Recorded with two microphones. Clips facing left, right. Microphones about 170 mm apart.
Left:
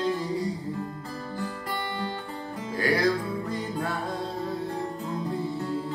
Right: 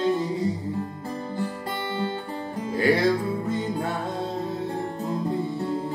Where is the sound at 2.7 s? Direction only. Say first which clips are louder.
Right 4 dB; 25° right (ahead or behind).